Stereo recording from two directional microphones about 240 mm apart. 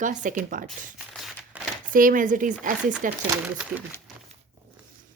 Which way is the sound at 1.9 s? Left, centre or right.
Right.